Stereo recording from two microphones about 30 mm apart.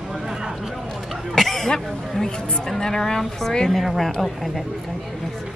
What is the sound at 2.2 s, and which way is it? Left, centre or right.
Speech, left.